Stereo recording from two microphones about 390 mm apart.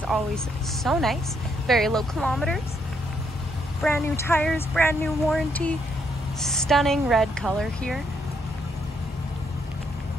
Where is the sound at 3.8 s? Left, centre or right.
Centre.